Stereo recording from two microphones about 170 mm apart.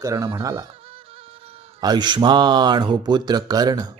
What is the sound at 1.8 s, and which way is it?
A man's voice, 25° right (ahead or behind).